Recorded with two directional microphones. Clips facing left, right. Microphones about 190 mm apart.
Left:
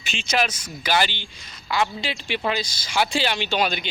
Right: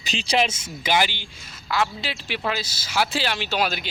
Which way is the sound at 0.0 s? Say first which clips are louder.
Right 2 dB; 35° right (ahead or behind).